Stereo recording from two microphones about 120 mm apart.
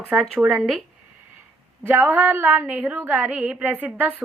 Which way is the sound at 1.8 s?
15° right (ahead or behind).